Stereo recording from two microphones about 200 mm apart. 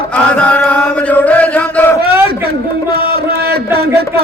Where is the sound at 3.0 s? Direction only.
50° right (ahead or behind).